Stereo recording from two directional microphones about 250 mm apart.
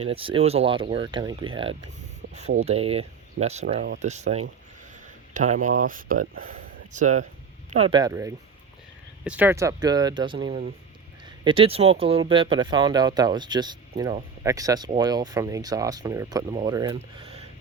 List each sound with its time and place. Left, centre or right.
0.0 s speech: right